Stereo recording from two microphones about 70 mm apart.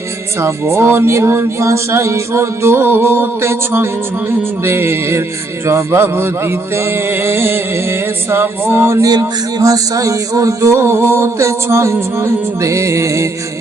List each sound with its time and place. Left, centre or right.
0.3 s music: right
9.0 s a sound: right
9.6 s music: right